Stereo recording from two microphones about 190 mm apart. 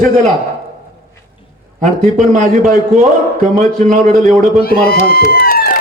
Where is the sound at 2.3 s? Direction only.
40° right (ahead or behind).